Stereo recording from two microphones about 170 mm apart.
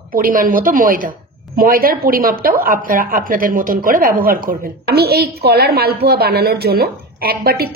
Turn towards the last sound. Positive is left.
turn(degrees=-65)  # may be behind; listen again after turning